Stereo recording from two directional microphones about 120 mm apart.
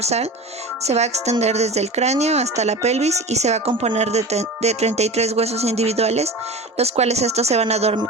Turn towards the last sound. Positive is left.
turn(degrees=-60)  # may be behind; listen again after turning